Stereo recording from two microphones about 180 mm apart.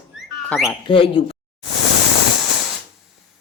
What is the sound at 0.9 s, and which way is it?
Speech, 30° left (ahead or behind).